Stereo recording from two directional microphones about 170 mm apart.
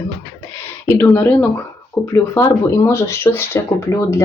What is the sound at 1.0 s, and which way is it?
Speech, 10° left (ahead or behind).